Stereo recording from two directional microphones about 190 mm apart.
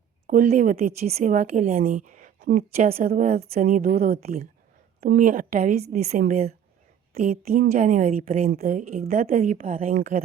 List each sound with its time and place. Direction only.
0.3 s a woman's voice: 40° right (ahead or behind)
3.7 s a woman's voice: 50° right (ahead or behind)
4.2 s a woman's voice: 35° right (ahead or behind)